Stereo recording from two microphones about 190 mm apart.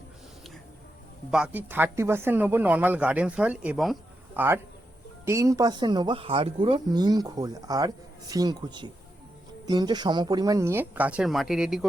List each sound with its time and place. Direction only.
1.3 s speech: 5° right (ahead or behind)